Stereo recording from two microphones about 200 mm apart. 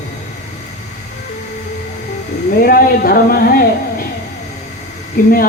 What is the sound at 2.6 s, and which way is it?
Speech, 45° left (ahead or behind).